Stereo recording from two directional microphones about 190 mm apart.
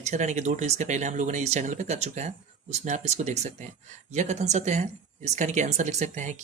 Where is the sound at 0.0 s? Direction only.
40° right (ahead or behind).